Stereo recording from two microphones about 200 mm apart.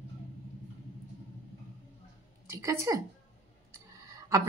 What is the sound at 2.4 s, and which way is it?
Speech, 15° right (ahead or behind).